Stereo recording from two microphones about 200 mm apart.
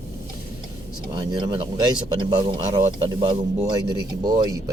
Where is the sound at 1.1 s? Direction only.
20° right (ahead or behind).